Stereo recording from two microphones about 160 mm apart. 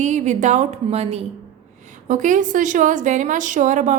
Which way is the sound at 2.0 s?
50° right (ahead or behind).